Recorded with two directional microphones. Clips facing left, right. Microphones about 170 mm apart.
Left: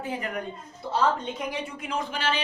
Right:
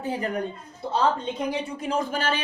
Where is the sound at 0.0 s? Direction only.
35° right (ahead or behind).